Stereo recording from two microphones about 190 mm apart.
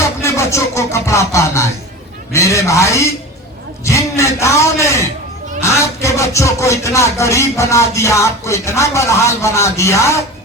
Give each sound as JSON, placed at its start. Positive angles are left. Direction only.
{"t": 0.2, "sound": "music", "side_deg": 15}
{"t": 2.3, "sound": "a man's voice", "side_deg": 15}